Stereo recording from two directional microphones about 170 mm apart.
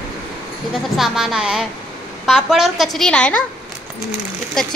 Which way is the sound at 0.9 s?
Centre (ahead or behind).